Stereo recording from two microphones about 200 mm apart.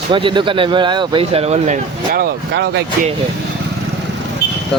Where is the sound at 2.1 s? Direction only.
50° right (ahead or behind).